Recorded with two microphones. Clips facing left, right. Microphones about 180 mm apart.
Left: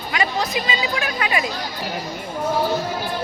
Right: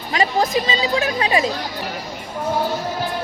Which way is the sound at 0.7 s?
30° right (ahead or behind).